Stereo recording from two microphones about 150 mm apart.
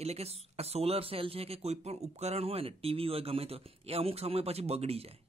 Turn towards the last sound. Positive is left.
turn(degrees=-40)  # may be behind; listen again after turning